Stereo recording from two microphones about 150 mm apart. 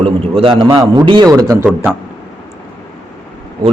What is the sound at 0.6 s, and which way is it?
Speech, 25° right (ahead or behind).